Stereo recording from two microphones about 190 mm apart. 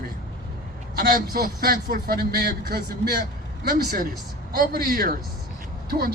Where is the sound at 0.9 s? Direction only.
50° right (ahead or behind).